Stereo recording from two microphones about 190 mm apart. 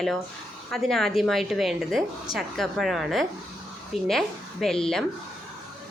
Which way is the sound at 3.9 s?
35° left (ahead or behind).